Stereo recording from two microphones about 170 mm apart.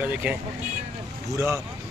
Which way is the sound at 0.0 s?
10° right (ahead or behind).